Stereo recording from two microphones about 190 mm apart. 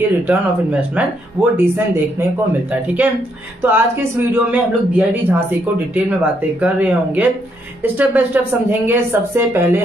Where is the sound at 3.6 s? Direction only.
10° right (ahead or behind).